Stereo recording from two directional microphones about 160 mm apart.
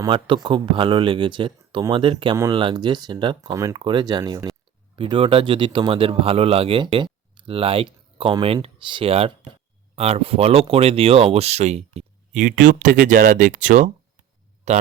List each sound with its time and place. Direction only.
0.0 s speech: 30° right (ahead or behind)
2.3 s speech: 20° right (ahead or behind); by 14.8 s 45° right (ahead or behind)